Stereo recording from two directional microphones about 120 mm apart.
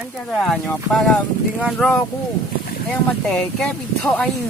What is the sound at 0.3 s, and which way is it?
Speech, 5° left (ahead or behind).